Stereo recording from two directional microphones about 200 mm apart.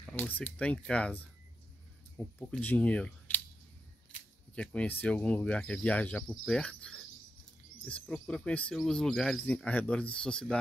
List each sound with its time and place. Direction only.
0.0 s speech: 10° left (ahead or behind)
4.6 s speech: 5° left (ahead or behind)